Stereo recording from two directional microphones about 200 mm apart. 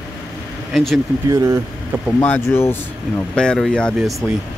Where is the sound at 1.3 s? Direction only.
15° right (ahead or behind).